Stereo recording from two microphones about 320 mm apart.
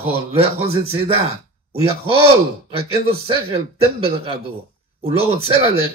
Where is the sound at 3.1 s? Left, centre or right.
Centre.